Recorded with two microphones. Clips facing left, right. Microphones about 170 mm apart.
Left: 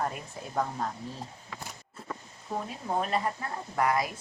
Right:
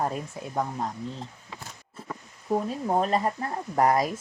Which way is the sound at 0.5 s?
15° right (ahead or behind).